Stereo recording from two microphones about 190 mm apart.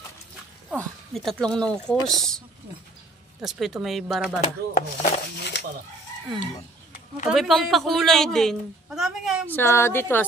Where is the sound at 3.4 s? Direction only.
Centre (ahead or behind).